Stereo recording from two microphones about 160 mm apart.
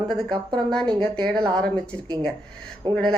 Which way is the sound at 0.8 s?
25° right (ahead or behind).